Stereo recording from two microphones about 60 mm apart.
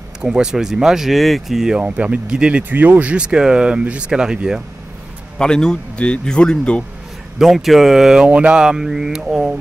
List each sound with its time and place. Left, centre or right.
0.2 s speech: centre
1.8 s speech: right
2.7 s speech: right; by 4.6 s centre
5.4 s a man's voice: centre
7.3 s speech: centre
8.3 s speech: centre